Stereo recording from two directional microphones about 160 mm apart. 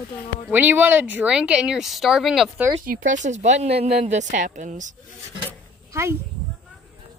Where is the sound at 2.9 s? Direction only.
55° right (ahead or behind).